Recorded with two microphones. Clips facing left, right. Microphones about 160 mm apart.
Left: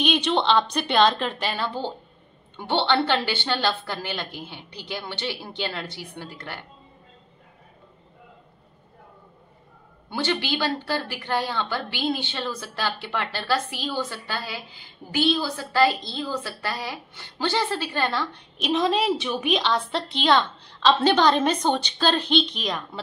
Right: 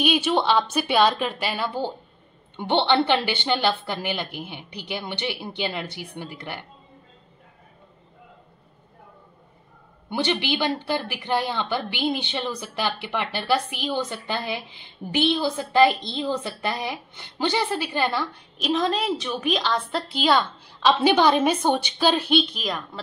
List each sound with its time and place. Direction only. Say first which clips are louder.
0.0 s a woman's voice: right 1 dB; 5° right (ahead or behind)
10.0 s a woman's voice: right 2 dB; 15° right (ahead or behind)
18.6 s a woman's voice: left 1 dB; centre (ahead or behind)